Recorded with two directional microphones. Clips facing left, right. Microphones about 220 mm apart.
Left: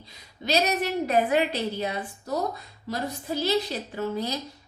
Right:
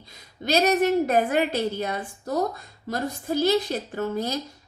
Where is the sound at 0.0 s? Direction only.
45° right (ahead or behind).